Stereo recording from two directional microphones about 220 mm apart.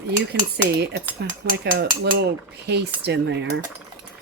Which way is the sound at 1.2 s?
50° right (ahead or behind).